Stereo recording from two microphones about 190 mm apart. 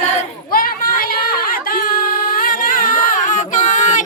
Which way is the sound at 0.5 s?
50° left (ahead or behind).